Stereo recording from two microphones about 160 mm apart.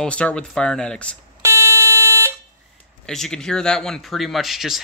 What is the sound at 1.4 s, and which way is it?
Alarm, 15° right (ahead or behind).